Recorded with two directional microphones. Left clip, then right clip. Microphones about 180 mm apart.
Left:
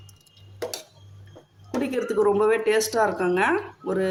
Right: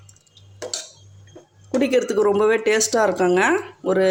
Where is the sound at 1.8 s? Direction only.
35° right (ahead or behind).